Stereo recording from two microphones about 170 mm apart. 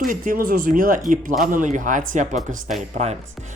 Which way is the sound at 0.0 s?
55° right (ahead or behind).